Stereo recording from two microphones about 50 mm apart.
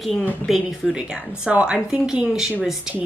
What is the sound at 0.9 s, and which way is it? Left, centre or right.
A woman's voice, centre.